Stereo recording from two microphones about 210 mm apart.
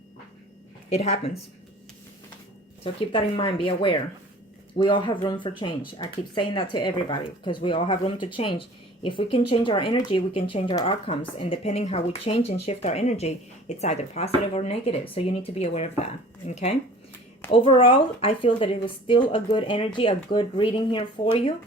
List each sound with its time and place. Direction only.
0.9 s a woman's voice: 30° left (ahead or behind)
2.8 s a woman's voice: 25° left (ahead or behind)